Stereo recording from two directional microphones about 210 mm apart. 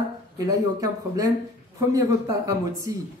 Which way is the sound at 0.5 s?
15° right (ahead or behind).